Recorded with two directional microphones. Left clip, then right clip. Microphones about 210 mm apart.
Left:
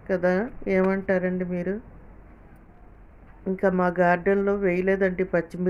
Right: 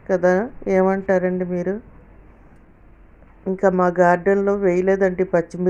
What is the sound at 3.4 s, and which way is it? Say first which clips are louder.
A woman's voice: right 6 dB; 5° right (ahead or behind).